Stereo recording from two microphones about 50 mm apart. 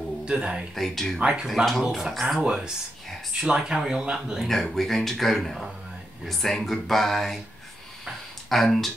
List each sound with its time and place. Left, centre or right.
0.3 s speech: centre
0.7 s speech: centre
1.2 s speech: centre
1.7 s speech: centre
4.5 s speech: centre
8.5 s speech: centre